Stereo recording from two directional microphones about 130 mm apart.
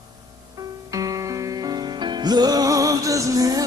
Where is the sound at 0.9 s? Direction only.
25° right (ahead or behind).